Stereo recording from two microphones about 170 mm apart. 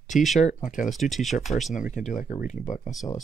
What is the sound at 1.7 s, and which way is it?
Speech, 45° left (ahead or behind).